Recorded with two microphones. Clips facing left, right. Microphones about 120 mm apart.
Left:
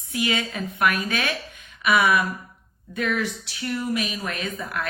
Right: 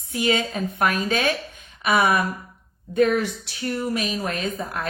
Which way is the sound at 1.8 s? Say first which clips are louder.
Even; 35° right (ahead or behind).